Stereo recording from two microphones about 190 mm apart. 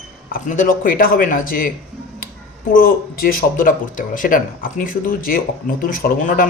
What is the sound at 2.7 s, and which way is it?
Speech, 50° left (ahead or behind).